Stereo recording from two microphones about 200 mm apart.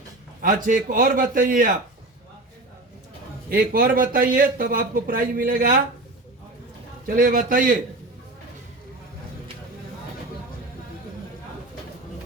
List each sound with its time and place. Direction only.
0.4 s a man's voice: 40° right (ahead or behind)
3.5 s a man's voice: 45° right (ahead or behind)
7.2 s a man's voice: 45° right (ahead or behind)